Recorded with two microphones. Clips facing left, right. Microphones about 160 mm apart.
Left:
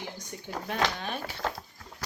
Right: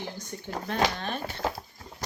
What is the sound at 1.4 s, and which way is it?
Speech, 5° right (ahead or behind).